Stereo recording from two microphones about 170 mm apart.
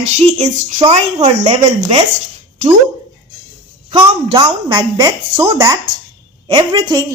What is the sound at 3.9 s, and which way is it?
A woman's voice, 30° right (ahead or behind).